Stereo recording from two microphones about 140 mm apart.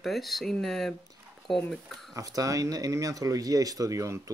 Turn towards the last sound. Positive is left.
turn(degrees=-20)  # may be behind; listen again after turning